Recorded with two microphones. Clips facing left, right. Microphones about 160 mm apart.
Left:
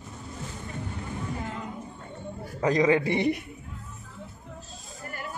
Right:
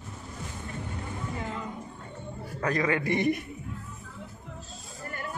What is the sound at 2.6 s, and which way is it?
Speech, 20° left (ahead or behind).